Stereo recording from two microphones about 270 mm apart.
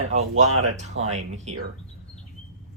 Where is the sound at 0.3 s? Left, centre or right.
Right.